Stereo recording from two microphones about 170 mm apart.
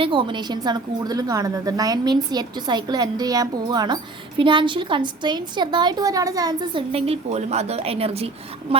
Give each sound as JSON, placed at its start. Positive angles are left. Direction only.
{"t": 0.0, "sound": "a woman's voice", "side_deg": -30}
{"t": 6.9, "sound": "a woman's voice", "side_deg": -35}